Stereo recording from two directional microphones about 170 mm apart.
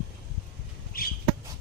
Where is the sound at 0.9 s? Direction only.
60° left (ahead or behind).